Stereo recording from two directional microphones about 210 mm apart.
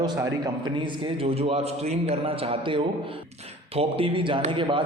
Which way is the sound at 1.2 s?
25° right (ahead or behind).